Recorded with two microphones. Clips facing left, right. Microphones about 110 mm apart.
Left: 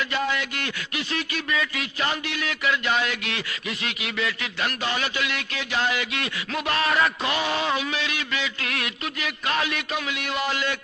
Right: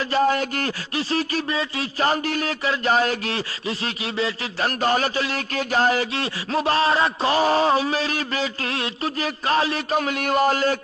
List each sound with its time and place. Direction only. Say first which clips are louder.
0.1 s speech: right 7 dB; 40° right (ahead or behind)